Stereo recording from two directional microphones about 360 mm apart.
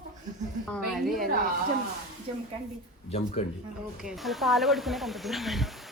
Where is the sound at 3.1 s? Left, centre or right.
Centre.